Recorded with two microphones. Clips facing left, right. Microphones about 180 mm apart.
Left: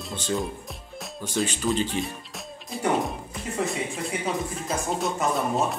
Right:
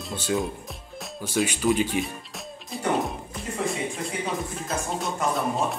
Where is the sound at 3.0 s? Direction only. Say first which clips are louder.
Even; centre (ahead or behind).